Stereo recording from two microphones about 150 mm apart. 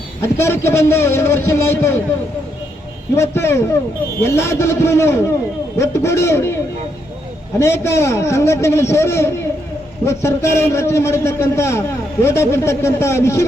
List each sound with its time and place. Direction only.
0.2 s a man's voice: 15° left (ahead or behind)
3.2 s a man's voice: 20° left (ahead or behind)
7.6 s a man's voice: 20° left (ahead or behind)